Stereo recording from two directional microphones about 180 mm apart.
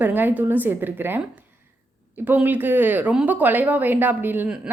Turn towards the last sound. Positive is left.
turn(degrees=-10)  # may be behind; listen again after turning